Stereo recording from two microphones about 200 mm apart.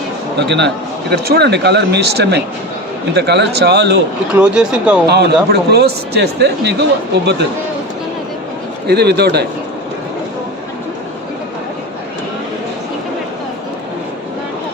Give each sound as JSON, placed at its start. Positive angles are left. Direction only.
{"t": 0.3, "sound": "speech", "side_deg": -60}
{"t": 4.4, "sound": "speech", "side_deg": -5}
{"t": 5.0, "sound": "speech", "side_deg": -55}
{"t": 8.9, "sound": "speech", "side_deg": -55}